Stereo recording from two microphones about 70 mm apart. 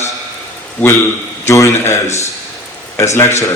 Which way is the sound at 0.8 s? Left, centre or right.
Left.